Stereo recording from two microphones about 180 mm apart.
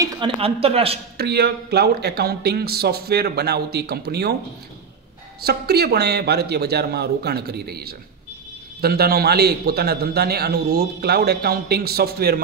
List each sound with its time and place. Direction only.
0.0 s speech: 30° right (ahead or behind)
1.1 s a man's voice: 65° right (ahead or behind)
5.4 s a man's voice: 65° right (ahead or behind)